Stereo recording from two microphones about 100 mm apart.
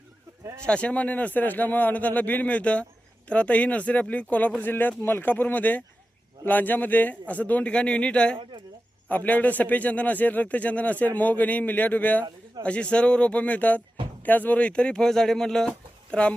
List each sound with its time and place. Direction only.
0.6 s speech: 10° left (ahead or behind)